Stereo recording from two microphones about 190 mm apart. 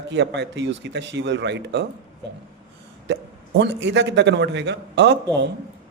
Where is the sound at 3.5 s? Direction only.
65° right (ahead or behind).